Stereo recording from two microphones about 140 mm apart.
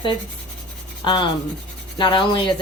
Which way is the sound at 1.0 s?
35° left (ahead or behind).